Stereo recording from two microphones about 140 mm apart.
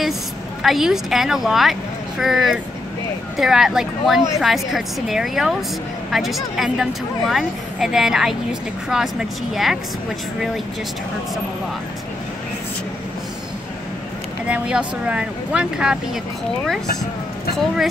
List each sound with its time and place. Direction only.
0.6 s speech: centre (ahead or behind)
14.5 s speech: 10° right (ahead or behind)